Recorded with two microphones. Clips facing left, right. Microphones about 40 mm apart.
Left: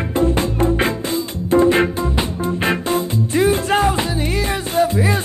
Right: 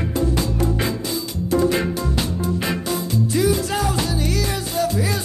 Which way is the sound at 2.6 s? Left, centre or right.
Left.